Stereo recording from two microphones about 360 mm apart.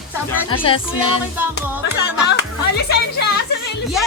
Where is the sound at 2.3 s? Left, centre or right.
Left.